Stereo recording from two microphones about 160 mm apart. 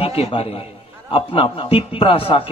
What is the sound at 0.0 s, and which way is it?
A man's voice, 35° left (ahead or behind).